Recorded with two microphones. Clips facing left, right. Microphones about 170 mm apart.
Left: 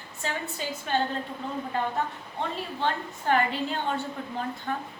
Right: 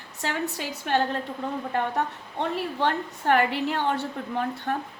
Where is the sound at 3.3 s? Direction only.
70° right (ahead or behind).